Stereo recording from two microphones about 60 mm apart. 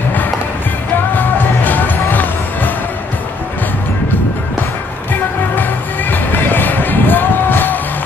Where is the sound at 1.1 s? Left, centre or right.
Left.